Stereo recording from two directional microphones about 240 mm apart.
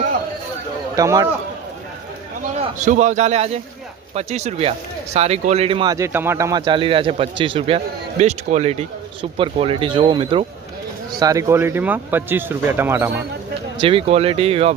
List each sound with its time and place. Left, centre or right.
0.9 s speech: centre
2.6 s speech: right; by 13.1 s centre
13.8 s speech: right